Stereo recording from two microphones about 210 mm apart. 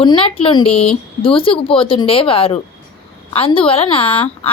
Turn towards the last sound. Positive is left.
turn(degrees=25)  # may be behind; listen again after turning